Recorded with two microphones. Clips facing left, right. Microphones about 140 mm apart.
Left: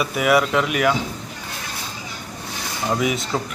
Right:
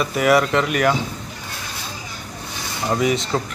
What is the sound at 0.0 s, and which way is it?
Speech, 5° left (ahead or behind).